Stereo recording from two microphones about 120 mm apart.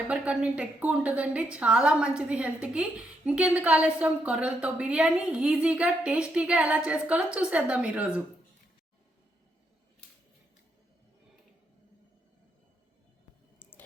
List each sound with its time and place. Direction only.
0.1 s a woman's voice: 10° right (ahead or behind)
13.6 s clicking: 15° left (ahead or behind)